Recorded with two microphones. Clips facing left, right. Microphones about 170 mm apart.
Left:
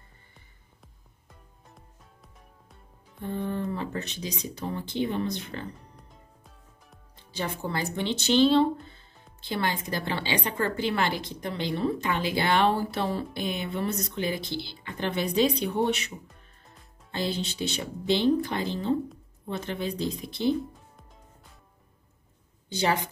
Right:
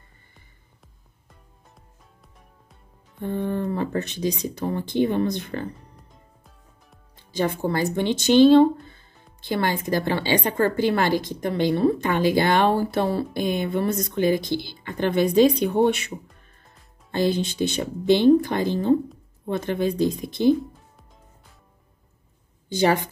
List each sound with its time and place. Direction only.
3.2 s a woman's voice: 55° right (ahead or behind)
5.9 s music: centre (ahead or behind)
7.3 s a woman's voice: 50° right (ahead or behind)
9.9 s a woman's voice: 45° right (ahead or behind)